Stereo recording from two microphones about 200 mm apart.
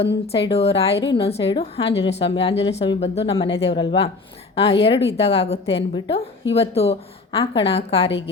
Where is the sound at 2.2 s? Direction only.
25° left (ahead or behind).